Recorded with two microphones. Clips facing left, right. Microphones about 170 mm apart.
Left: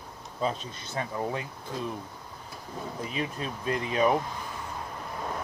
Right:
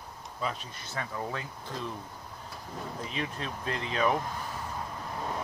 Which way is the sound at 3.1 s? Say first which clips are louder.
Left 3 dB; 15° left (ahead or behind).